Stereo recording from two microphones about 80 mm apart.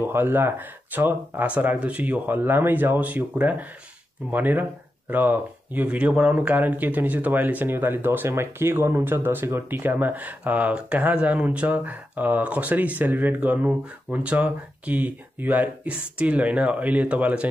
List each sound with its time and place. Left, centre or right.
0.0 s speech: right